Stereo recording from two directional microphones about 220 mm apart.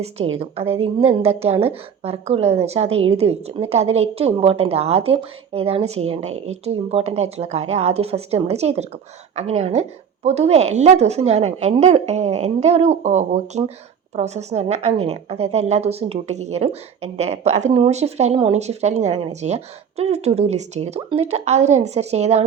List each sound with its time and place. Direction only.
0.2 s a woman's voice: 25° right (ahead or behind)